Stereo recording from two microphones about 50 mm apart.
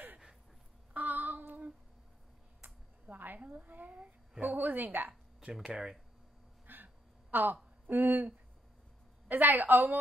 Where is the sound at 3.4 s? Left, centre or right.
Right.